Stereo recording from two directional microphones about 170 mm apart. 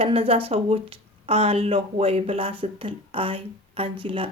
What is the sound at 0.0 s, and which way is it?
Speech, 35° right (ahead or behind).